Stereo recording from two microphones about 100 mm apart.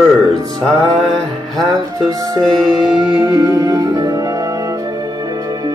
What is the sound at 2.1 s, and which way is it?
Music, 40° right (ahead or behind).